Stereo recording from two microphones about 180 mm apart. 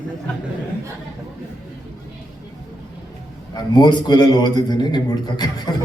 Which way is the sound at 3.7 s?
25° left (ahead or behind).